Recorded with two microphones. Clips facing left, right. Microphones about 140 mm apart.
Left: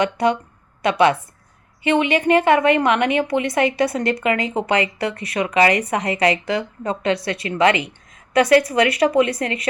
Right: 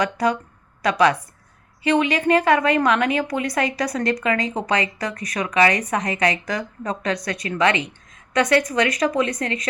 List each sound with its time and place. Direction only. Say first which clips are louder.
0.0 s a woman's voice: left 2 dB; 25° left (ahead or behind)